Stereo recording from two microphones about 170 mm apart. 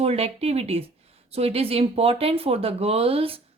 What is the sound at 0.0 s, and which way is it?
Speech, 35° right (ahead or behind).